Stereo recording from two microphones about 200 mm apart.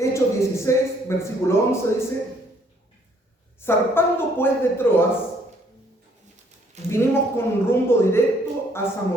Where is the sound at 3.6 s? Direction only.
10° left (ahead or behind).